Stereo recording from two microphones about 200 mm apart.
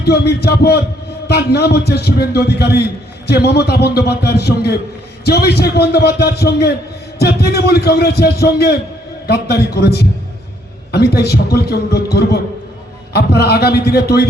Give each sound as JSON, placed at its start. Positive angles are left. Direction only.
{"t": 0.0, "sound": "a man's voice", "side_deg": 55}